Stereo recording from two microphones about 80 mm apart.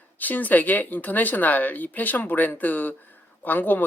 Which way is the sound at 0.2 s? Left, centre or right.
Left.